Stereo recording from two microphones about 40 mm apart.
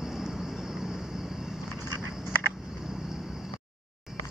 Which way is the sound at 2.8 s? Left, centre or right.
Centre.